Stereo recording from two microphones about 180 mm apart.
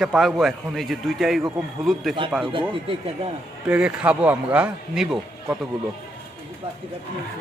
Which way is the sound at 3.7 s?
5° right (ahead or behind).